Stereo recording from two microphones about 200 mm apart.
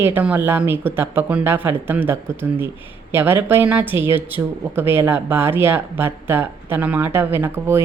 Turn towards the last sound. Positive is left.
turn(degrees=-10)  # may be behind; listen again after turning